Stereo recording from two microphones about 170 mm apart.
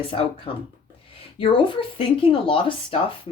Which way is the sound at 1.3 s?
30° left (ahead or behind).